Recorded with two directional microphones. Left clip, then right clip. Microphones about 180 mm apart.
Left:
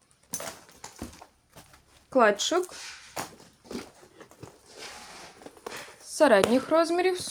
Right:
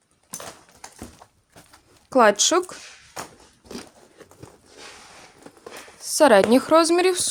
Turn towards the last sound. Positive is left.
turn(degrees=-60)  # may be behind; listen again after turning